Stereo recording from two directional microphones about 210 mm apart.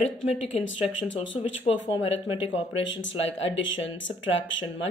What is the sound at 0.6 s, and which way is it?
Speech, 65° left (ahead or behind).